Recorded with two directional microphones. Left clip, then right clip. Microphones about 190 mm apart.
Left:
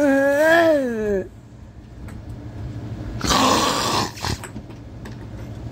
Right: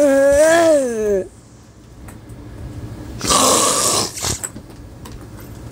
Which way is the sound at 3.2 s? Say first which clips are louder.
Right 3 dB; 5° right (ahead or behind).